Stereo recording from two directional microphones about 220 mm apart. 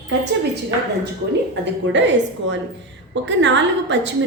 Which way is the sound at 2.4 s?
55° right (ahead or behind).